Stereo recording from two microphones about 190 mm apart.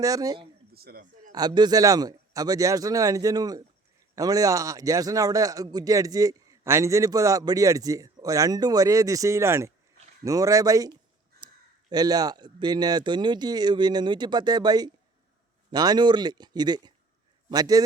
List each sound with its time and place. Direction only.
0.0 s speech: 20° right (ahead or behind)
0.7 s a sound: 55° right (ahead or behind)
1.3 s a man's voice: 20° right (ahead or behind)